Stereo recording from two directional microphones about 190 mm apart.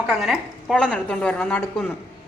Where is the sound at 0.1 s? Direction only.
Centre (ahead or behind).